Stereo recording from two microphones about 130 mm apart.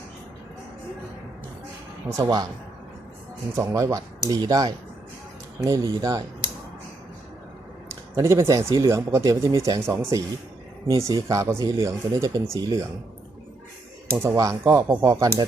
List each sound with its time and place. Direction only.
2.0 s speech: 25° right (ahead or behind)
3.5 s speech: 25° right (ahead or behind)
8.1 s speech: 20° right (ahead or behind)
14.1 s speech: 20° right (ahead or behind)